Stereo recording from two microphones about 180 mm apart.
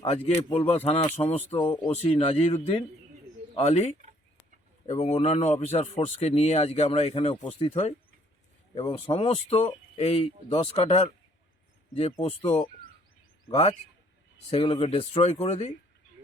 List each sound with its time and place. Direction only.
0.7 s speech: 35° left (ahead or behind)
3.6 s speech: 40° left (ahead or behind)